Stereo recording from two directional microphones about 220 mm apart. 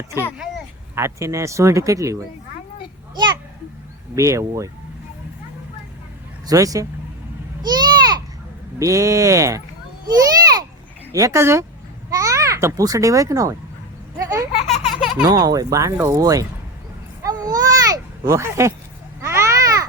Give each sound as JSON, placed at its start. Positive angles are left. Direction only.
{"t": 0.3, "sound": "speech", "side_deg": -5}
{"t": 4.1, "sound": "speech", "side_deg": -15}
{"t": 6.5, "sound": "speech", "side_deg": -15}
{"t": 7.6, "sound": "a sound", "side_deg": -20}
{"t": 8.8, "sound": "speech", "side_deg": -15}
{"t": 10.1, "sound": "children playing", "side_deg": -15}
{"t": 11.1, "sound": "a child's voice", "side_deg": -15}
{"t": 14.2, "sound": "a sound", "side_deg": -15}
{"t": 14.8, "sound": "baby laughter", "side_deg": 0}
{"t": 15.2, "sound": "speech", "side_deg": -15}
{"t": 17.2, "sound": "a sound", "side_deg": -15}